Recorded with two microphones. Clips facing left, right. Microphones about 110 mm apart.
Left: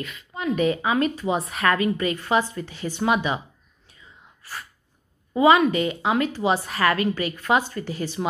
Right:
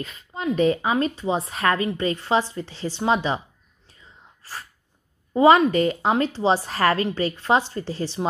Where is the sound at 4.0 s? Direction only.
35° right (ahead or behind).